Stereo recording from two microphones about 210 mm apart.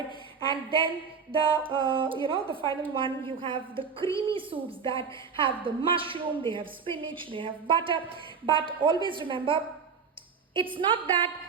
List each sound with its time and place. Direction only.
0.5 s a woman's voice: 25° right (ahead or behind)
10.8 s a woman's voice: 25° right (ahead or behind)